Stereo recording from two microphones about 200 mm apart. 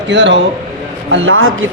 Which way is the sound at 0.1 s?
60° right (ahead or behind).